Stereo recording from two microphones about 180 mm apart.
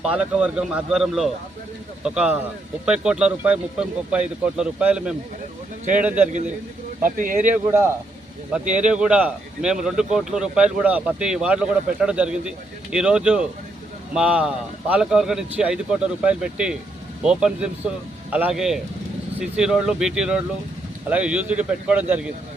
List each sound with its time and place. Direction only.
0.0 s speech: 5° right (ahead or behind)
7.2 s speech: 50° right (ahead or behind)
7.4 s speech: 10° right (ahead or behind)